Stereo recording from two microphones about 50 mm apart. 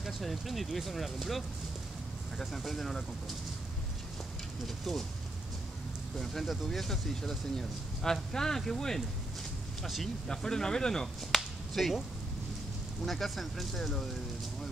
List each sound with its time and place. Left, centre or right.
0.0 s speech: centre
6.1 s speech: centre
10.2 s speech: centre
13.0 s speech: centre